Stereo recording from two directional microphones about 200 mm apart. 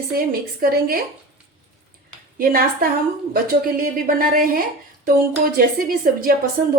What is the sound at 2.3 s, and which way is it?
A woman's voice, 45° right (ahead or behind).